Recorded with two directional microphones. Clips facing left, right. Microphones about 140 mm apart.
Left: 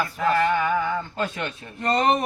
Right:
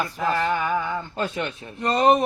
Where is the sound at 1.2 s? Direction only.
20° right (ahead or behind).